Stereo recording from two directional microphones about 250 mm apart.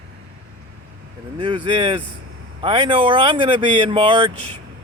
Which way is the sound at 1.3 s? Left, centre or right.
Centre.